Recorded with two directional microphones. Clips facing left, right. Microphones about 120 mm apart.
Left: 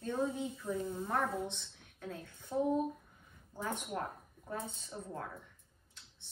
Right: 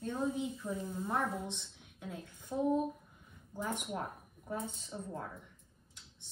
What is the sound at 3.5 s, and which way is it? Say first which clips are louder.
A child's voice: even; 15° right (ahead or behind).